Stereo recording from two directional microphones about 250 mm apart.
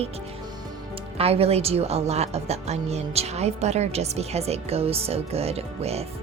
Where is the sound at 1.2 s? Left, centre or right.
Right.